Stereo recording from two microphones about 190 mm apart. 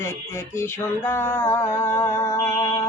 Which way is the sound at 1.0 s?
15° left (ahead or behind).